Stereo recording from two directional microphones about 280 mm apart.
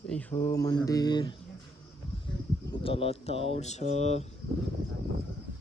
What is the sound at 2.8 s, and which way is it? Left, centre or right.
Speech, centre.